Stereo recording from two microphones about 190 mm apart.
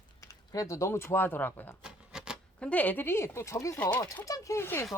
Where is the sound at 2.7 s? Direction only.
10° left (ahead or behind).